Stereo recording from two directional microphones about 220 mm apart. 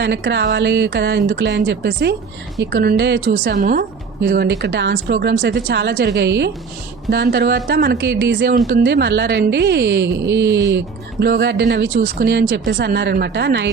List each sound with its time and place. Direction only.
0.0 s a woman's voice: 50° right (ahead or behind)